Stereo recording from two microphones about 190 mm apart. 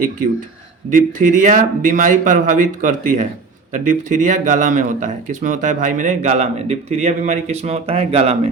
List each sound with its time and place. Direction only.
0.9 s speech: 40° right (ahead or behind)